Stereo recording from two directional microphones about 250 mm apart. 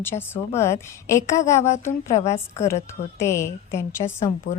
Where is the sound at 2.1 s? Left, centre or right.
Left.